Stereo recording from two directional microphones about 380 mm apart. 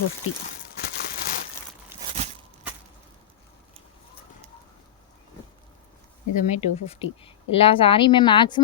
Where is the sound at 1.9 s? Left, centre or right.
Centre.